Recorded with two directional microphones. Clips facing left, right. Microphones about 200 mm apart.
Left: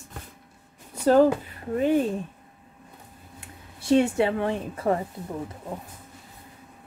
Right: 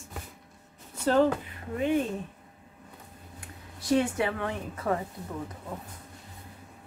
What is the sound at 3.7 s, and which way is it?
A woman's voice, 25° left (ahead or behind).